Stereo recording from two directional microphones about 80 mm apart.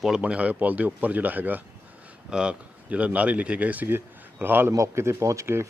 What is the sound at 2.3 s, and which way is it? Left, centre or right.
Speech, centre.